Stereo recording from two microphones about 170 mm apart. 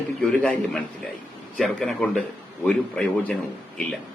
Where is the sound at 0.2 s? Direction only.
5° left (ahead or behind).